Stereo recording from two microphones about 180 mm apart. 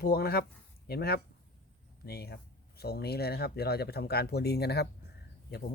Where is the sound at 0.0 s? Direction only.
60° left (ahead or behind).